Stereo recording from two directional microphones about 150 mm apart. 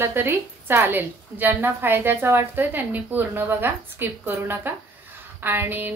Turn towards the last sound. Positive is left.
turn(degrees=-15)  # may be behind; listen again after turning